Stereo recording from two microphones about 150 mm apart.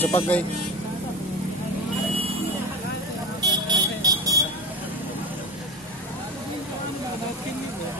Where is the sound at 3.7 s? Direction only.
25° right (ahead or behind).